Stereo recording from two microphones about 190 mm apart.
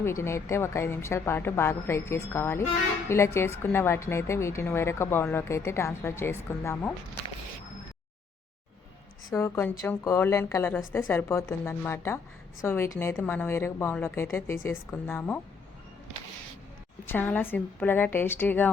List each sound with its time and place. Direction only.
0.0 s a woman's voice: 15° left (ahead or behind)
9.3 s a woman's voice: 15° left (ahead or behind)
17.1 s a woman's voice: 10° left (ahead or behind)